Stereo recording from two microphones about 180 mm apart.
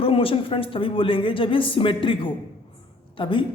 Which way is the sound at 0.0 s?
30° left (ahead or behind).